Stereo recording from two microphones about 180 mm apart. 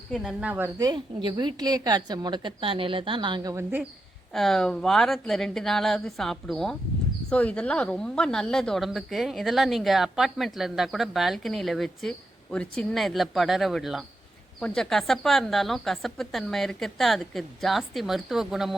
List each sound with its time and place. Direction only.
0.1 s a woman's voice: centre (ahead or behind)
0.8 s a woman's voice: 25° right (ahead or behind)
4.4 s a woman's voice: centre (ahead or behind)